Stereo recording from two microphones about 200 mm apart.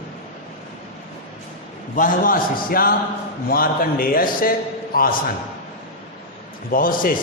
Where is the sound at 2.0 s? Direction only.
45° left (ahead or behind).